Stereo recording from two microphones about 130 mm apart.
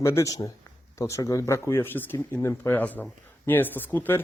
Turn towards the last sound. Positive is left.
turn(degrees=15)  # may be behind; listen again after turning